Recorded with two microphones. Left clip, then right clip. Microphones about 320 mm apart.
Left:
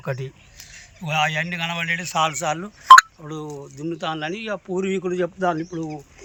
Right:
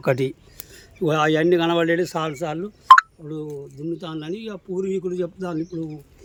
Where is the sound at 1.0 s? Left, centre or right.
Right.